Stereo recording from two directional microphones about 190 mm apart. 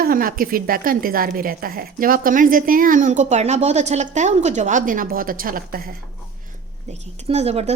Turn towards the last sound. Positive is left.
turn(degrees=-35)  # may be behind; listen again after turning